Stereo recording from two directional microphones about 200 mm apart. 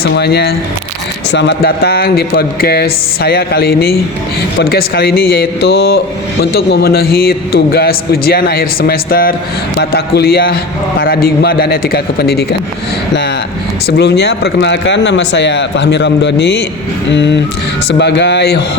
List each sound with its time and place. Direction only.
0.0 s a man's voice: 55° left (ahead or behind)
13.8 s speech: 55° left (ahead or behind)